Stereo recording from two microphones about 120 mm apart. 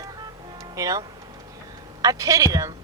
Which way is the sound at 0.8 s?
30° right (ahead or behind).